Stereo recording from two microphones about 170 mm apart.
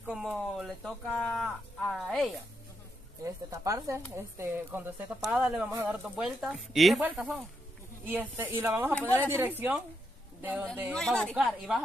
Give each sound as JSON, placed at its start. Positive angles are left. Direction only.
{"t": 0.0, "sound": "speech", "side_deg": -5}
{"t": 3.5, "sound": "speech", "side_deg": -20}
{"t": 10.9, "sound": "speech", "side_deg": 5}